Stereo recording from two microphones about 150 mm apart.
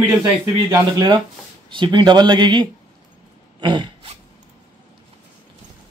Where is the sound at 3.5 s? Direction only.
30° right (ahead or behind).